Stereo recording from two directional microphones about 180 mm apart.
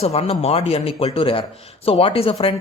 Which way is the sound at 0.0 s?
35° left (ahead or behind).